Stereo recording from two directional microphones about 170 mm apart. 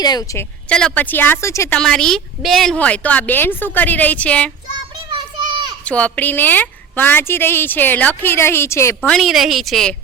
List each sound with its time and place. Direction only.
0.0 s a woman's voice: 25° left (ahead or behind)
0.7 s a woman's voice: 5° left (ahead or behind)
1.8 s a woman's voice: 5° left (ahead or behind)
5.1 s children playing: 25° right (ahead or behind)
5.8 s a woman's voice: 10° left (ahead or behind)
9.0 s a woman's voice: centre (ahead or behind)